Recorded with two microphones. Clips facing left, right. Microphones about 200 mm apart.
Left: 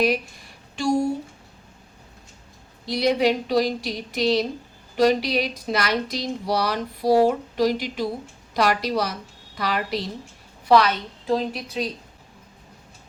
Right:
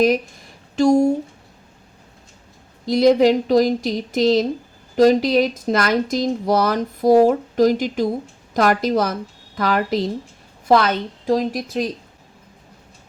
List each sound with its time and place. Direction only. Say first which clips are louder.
0.8 s speech: right 7 dB; 45° right (ahead or behind)
2.8 s speech: right 7 dB; 45° right (ahead or behind)